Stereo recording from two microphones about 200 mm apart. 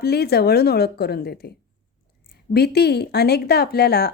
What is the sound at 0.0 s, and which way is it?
Speech, 55° left (ahead or behind).